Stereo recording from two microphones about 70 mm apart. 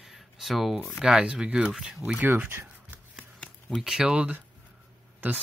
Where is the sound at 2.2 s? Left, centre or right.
Right.